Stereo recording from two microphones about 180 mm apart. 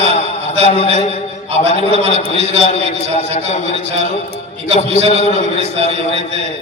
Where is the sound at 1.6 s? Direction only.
35° right (ahead or behind).